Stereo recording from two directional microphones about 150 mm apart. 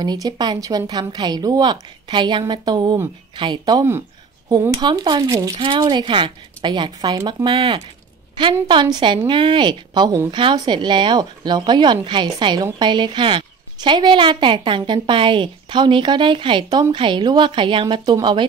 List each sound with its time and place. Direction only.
0.0 s a woman's voice: 30° right (ahead or behind)
7.4 s a woman's voice: 35° right (ahead or behind)